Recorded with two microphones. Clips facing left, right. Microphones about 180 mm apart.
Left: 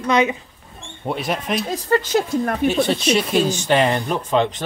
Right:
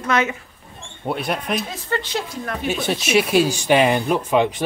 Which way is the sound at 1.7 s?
40° left (ahead or behind).